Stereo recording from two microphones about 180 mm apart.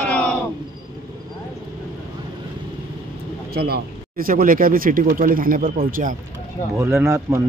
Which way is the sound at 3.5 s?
60° right (ahead or behind).